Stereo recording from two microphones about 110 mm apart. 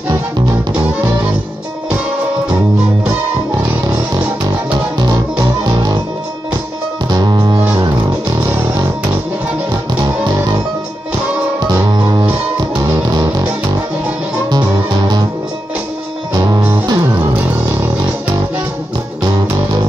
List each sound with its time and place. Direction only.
4.9 s music: 35° right (ahead or behind)
7.1 s music: 40° right (ahead or behind)
11.6 s music: 40° right (ahead or behind)
14.5 s music: 40° right (ahead or behind)
16.3 s music: 40° right (ahead or behind)
19.3 s music: 40° right (ahead or behind)